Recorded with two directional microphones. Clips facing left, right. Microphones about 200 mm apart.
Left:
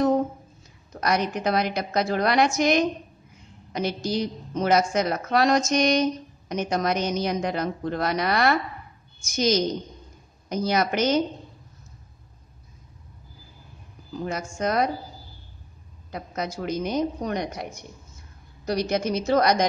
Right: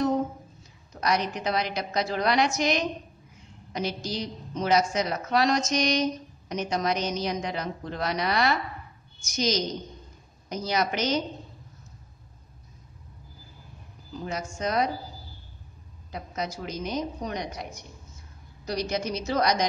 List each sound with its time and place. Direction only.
1.0 s a woman's voice: 50° left (ahead or behind)
14.2 s a woman's voice: 55° left (ahead or behind)
16.1 s a woman's voice: 50° left (ahead or behind)